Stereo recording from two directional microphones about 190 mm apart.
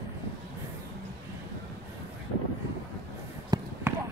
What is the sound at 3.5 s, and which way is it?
Basketball bounce, 20° right (ahead or behind).